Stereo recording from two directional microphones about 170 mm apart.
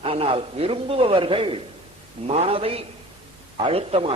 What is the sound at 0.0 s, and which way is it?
Speech, 35° right (ahead or behind).